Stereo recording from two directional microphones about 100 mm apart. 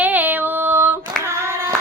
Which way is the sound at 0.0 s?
15° right (ahead or behind).